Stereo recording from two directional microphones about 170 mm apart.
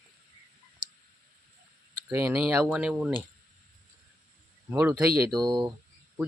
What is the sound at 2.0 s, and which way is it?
Speech, 10° right (ahead or behind).